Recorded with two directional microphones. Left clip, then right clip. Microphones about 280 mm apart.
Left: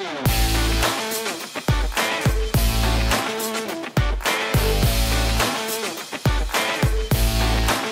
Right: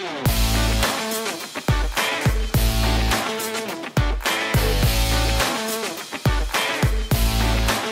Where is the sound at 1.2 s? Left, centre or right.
Centre.